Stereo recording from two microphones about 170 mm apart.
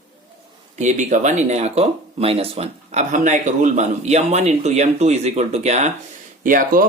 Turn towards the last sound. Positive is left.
turn(degrees=-50)  # may be behind; listen again after turning